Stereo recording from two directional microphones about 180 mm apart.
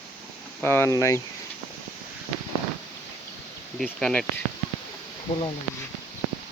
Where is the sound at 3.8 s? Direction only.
5° left (ahead or behind).